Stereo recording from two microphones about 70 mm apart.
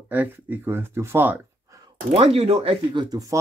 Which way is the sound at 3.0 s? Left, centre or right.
Right.